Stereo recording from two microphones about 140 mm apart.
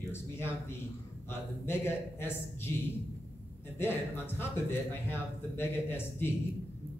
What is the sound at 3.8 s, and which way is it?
A man's voice, 15° left (ahead or behind).